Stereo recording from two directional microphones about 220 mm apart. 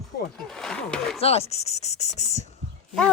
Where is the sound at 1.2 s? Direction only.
25° left (ahead or behind).